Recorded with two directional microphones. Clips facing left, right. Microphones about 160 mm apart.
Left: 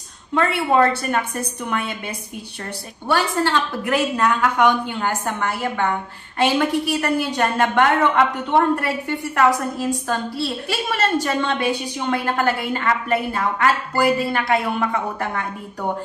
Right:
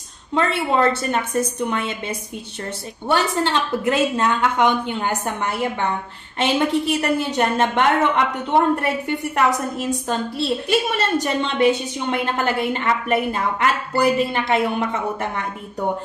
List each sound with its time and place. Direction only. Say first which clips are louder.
0.3 s a woman's voice: left 1 dB; 20° right (ahead or behind)